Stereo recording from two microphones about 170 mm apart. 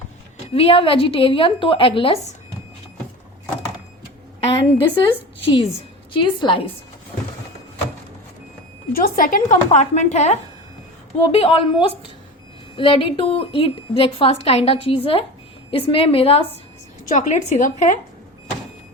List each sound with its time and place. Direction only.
0.5 s a woman's voice: 35° left (ahead or behind)
4.4 s a woman's voice: 30° left (ahead or behind)
7.1 s a sound: 35° left (ahead or behind)
8.9 s speech: 55° left (ahead or behind)
9.6 s a woman's voice: 40° left (ahead or behind)
17.1 s a woman's voice: 45° left (ahead or behind)